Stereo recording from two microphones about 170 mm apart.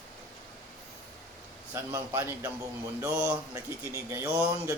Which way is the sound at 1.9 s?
15° right (ahead or behind).